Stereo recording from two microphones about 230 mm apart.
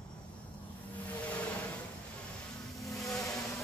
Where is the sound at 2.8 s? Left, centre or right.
Centre.